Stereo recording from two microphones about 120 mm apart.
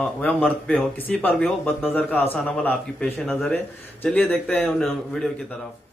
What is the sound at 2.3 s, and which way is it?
Speech, 5° left (ahead or behind).